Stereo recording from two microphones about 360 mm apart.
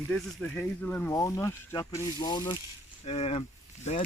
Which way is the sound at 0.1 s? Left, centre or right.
Centre.